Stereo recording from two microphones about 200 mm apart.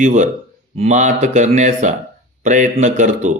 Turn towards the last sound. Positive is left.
turn(degrees=-40)  # may be behind; listen again after turning